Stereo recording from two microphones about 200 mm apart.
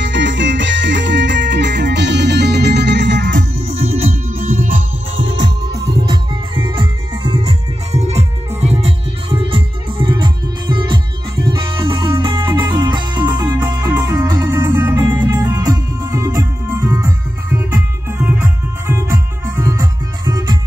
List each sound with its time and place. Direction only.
0.0 s music: 65° right (ahead or behind)
3.6 s music: 30° right (ahead or behind)
4.3 s music: 45° right (ahead or behind)
5.2 s music: 65° right (ahead or behind)
6.0 s music: 25° right (ahead or behind)